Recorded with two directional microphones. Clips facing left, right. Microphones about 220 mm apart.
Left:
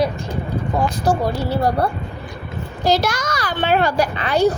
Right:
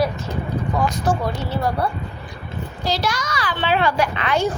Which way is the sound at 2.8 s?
45° left (ahead or behind).